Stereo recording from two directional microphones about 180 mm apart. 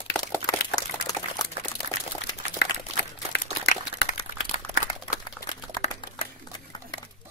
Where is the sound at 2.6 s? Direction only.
80° left.